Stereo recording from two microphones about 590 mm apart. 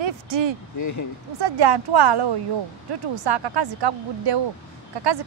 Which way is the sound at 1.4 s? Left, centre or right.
Right.